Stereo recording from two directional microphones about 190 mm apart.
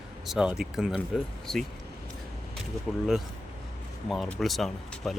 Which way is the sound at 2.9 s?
5° left (ahead or behind).